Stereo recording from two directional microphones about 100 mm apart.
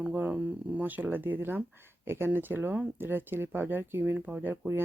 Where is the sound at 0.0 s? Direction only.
15° right (ahead or behind).